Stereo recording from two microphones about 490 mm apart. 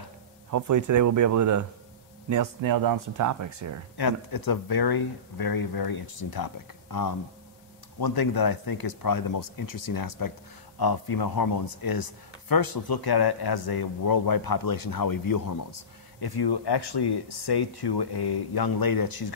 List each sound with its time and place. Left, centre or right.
0.5 s speech: right
3.9 s speech: left